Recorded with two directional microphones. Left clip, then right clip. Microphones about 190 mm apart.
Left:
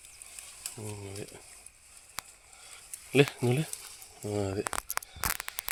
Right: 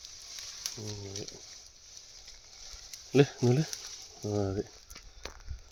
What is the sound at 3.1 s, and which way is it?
Speech, 30° right (ahead or behind).